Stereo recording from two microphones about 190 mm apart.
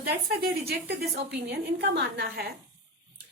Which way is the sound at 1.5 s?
60° right (ahead or behind).